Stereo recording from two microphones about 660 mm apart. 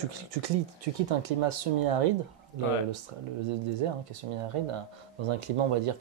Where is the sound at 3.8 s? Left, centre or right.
Right.